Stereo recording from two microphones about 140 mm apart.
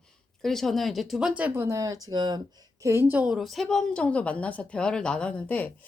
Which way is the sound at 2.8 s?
20° right (ahead or behind).